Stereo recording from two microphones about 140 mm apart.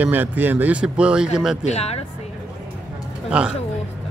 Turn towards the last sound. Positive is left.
turn(degrees=-5)  # may be behind; listen again after turning